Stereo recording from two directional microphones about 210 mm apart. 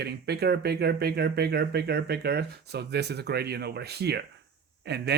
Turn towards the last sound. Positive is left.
turn(degrees=-50)  # may be behind; listen again after turning